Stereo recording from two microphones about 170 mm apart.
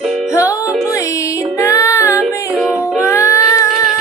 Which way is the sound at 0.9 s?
20° left (ahead or behind).